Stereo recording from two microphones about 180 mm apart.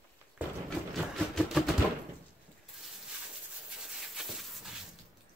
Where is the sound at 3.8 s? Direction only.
Centre (ahead or behind).